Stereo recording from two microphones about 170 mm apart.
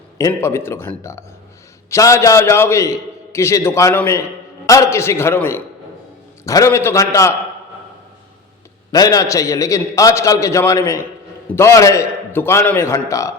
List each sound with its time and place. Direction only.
0.2 s a man's voice: 15° left (ahead or behind)
8.9 s a man's voice: 20° left (ahead or behind)